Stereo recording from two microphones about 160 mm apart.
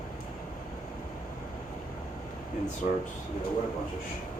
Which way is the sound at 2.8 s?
50° left (ahead or behind).